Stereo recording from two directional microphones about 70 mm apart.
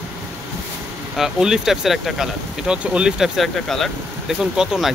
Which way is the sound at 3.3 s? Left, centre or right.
Centre.